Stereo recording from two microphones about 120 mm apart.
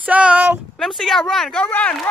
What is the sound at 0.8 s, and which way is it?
Speech, 5° left (ahead or behind).